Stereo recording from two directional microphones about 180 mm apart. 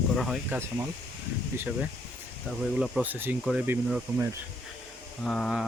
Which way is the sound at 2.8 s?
5° right (ahead or behind).